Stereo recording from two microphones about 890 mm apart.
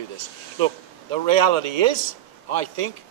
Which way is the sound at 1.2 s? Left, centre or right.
Right.